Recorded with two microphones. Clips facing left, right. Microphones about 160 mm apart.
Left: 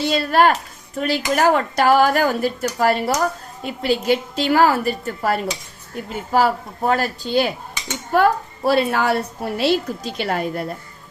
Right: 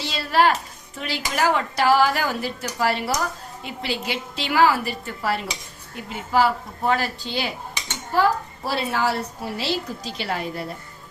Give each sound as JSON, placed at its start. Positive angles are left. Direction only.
{"t": 0.0, "sound": "speech", "side_deg": 50}
{"t": 8.1, "sound": "a woman's voice", "side_deg": 60}